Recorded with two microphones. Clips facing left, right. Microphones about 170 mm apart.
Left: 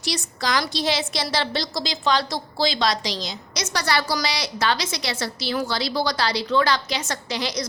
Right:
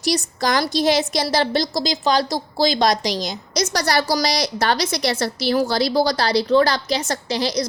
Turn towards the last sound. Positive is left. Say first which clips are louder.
# right 5 dB
turn(degrees=-35)  # may be behind; listen again after turning